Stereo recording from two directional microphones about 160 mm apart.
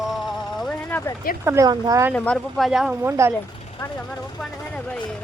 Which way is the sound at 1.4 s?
20° right (ahead or behind).